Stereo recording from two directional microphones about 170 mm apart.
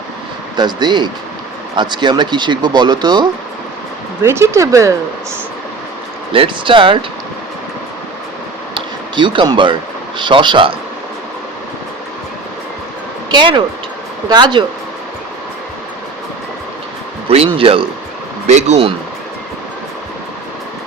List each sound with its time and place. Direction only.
0.5 s speech: 25° right (ahead or behind)
4.2 s speech: 15° right (ahead or behind)
6.3 s speech: 30° right (ahead or behind)
8.7 s a sound: 30° right (ahead or behind)
10.2 s speech: 30° right (ahead or behind)
13.3 s speech: 30° right (ahead or behind)
17.2 s speech: 35° right (ahead or behind)